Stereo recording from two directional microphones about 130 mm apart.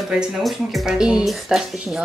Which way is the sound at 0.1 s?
Centre (ahead or behind).